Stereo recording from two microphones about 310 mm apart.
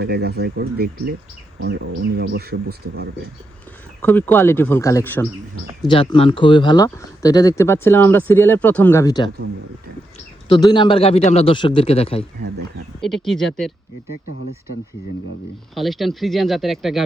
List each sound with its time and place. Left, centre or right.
0.0 s speech: right
4.0 s speech: centre
10.5 s speech: centre
13.0 s speech: centre
15.7 s speech: centre